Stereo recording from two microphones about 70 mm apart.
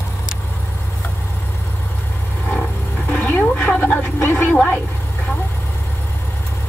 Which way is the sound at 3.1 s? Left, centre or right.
Left.